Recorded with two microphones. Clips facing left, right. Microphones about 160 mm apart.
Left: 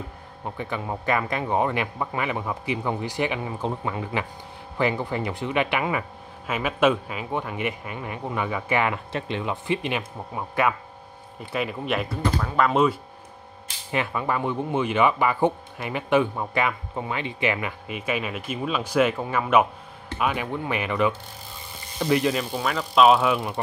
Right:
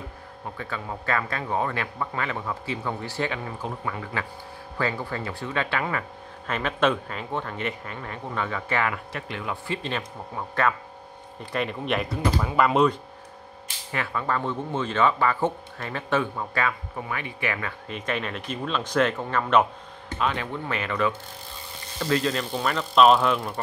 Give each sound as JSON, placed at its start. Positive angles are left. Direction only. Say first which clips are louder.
{"t": 0.6, "sound": "speech", "louder": "left 4 dB", "side_deg": 20}
{"t": 13.9, "sound": "speech", "louder": "left 2 dB", "side_deg": 15}